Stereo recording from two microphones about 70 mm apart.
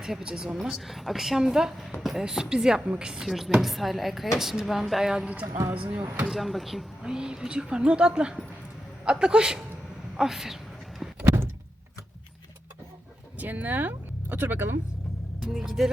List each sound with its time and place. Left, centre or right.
0.0 s a woman's voice: centre
6.3 s speech: centre
7.0 s a woman's voice: centre
13.4 s speech: right
15.4 s speech: centre